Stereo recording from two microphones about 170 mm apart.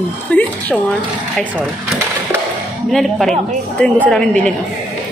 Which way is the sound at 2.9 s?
Centre (ahead or behind).